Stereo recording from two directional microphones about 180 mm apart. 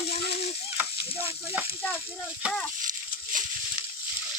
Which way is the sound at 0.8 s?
10° right (ahead or behind).